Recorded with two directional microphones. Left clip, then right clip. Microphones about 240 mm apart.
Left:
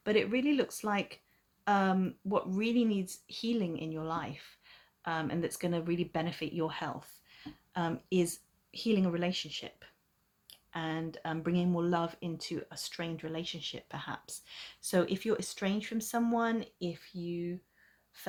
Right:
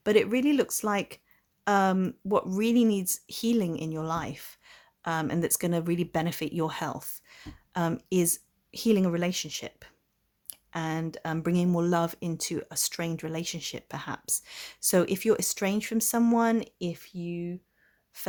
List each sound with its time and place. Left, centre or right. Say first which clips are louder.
0.0 s speech: right 6 dB; right